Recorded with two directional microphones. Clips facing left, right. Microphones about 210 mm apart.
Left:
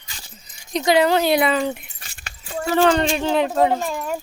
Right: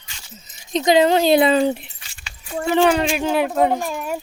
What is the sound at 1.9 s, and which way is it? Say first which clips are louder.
Keys jangling: left 2 dB; 50° left (ahead or behind).